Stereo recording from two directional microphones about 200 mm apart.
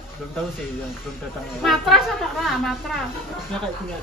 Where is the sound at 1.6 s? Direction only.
Centre (ahead or behind).